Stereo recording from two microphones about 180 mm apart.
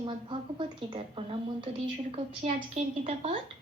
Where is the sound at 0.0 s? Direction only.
30° right (ahead or behind).